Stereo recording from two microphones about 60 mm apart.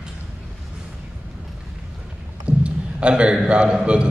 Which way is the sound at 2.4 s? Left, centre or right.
Centre.